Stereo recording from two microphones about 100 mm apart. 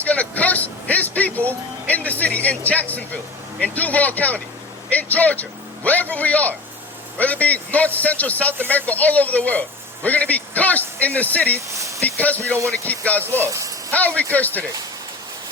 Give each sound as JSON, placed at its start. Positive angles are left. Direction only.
{"t": 0.0, "sound": "vehicle", "side_deg": 15}
{"t": 3.6, "sound": "speech", "side_deg": 15}
{"t": 11.7, "sound": "a sound", "side_deg": -30}
{"t": 12.0, "sound": "speech", "side_deg": 15}
{"t": 13.2, "sound": "speech", "side_deg": -25}
{"t": 13.9, "sound": "speech", "side_deg": 15}